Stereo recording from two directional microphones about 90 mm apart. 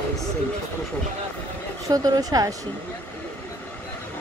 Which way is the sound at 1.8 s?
45° right (ahead or behind).